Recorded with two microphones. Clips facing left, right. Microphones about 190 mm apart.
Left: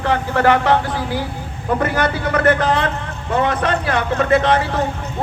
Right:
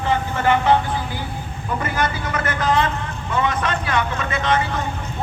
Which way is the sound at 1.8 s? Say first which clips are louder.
Left 3 dB; 70° left (ahead or behind).